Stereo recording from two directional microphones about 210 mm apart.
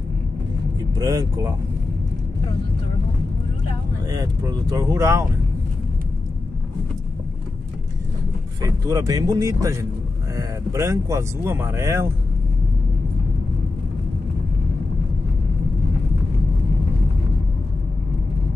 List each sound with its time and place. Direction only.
0.9 s speech: 15° right (ahead or behind)
4.1 s speech: 15° right (ahead or behind)
8.6 s speech: 15° right (ahead or behind)